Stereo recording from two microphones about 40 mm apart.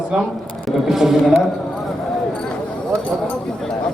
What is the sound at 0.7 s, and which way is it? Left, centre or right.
Speech, centre.